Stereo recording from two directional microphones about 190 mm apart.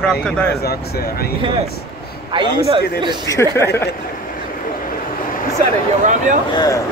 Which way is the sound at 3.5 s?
15° left (ahead or behind).